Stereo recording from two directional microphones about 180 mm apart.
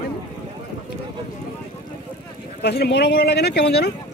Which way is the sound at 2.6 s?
65° left (ahead or behind).